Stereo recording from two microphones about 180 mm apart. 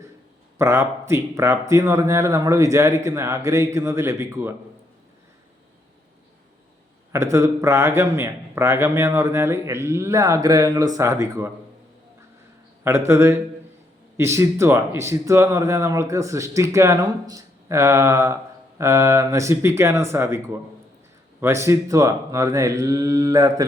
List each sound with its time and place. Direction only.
0.6 s a man's voice: 15° right (ahead or behind)
7.1 s a man's voice: 15° right (ahead or behind)
12.8 s a man's voice: 15° right (ahead or behind)